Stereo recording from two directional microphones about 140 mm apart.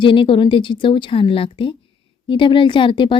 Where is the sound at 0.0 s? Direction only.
40° left (ahead or behind).